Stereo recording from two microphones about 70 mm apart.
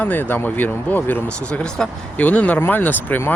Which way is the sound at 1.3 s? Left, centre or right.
Centre.